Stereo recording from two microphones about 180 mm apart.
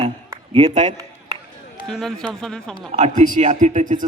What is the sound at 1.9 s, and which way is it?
Speech, centre (ahead or behind).